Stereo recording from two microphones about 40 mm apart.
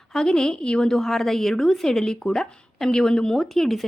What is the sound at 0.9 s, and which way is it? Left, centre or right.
Speech, centre.